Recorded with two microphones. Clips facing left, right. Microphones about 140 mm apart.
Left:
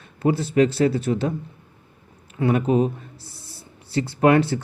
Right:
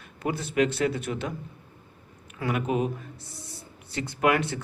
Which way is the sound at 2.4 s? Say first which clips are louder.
Left 7 dB; 30° left (ahead or behind).